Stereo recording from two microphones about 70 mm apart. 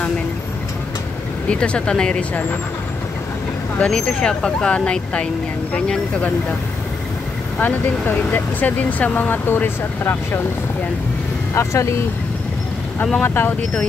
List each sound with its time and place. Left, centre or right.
1.5 s speech: centre
3.7 s speech: centre
7.6 s speech: left
11.5 s speech: left
13.2 s speech: left